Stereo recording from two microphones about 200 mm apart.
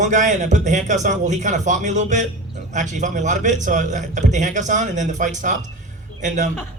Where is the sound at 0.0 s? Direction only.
35° right (ahead or behind).